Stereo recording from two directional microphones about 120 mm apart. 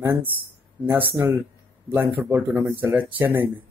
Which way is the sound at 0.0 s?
20° right (ahead or behind).